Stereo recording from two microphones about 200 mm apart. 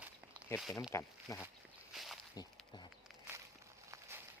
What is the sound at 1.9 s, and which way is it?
Walk, centre (ahead or behind).